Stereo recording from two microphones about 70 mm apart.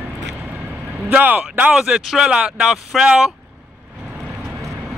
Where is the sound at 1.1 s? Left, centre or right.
Right.